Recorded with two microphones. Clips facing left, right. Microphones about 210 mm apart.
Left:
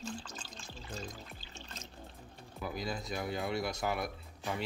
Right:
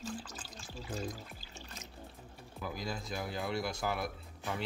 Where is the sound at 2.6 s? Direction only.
Centre (ahead or behind).